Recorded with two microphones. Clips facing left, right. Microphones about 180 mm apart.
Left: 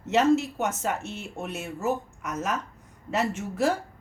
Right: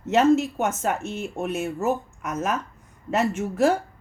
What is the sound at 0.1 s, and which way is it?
A woman's voice, 50° right (ahead or behind).